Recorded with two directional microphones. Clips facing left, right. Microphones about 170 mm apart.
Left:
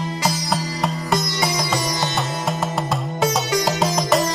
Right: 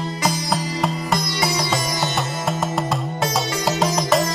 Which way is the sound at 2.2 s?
Centre (ahead or behind).